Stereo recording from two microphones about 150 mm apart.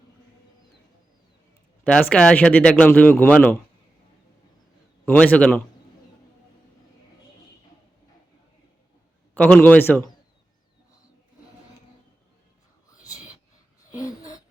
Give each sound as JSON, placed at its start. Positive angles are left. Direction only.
{"t": 1.8, "sound": "speech", "side_deg": 10}
{"t": 5.0, "sound": "speech", "side_deg": 10}
{"t": 9.3, "sound": "speech", "side_deg": 10}
{"t": 13.9, "sound": "a sound", "side_deg": 25}